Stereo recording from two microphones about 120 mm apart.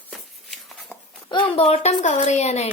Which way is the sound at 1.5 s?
60° left (ahead or behind).